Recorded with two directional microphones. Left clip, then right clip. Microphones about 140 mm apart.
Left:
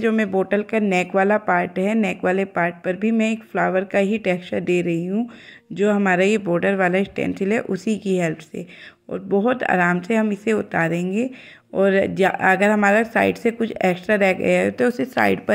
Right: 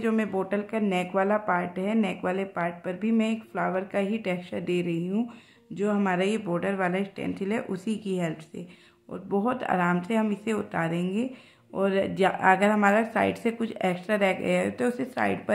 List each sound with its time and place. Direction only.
0.0 s speech: 35° left (ahead or behind)